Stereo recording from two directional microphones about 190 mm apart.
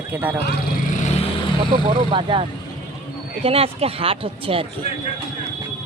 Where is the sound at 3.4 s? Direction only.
30° right (ahead or behind).